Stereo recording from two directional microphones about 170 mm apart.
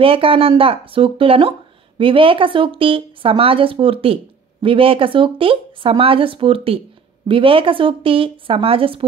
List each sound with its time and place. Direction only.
0.0 s a woman's voice: 30° right (ahead or behind)